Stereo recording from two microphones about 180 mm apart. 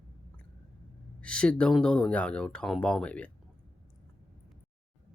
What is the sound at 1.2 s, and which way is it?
Speech, 5° left (ahead or behind).